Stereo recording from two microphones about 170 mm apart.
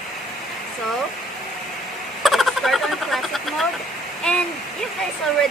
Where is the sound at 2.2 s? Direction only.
Centre (ahead or behind).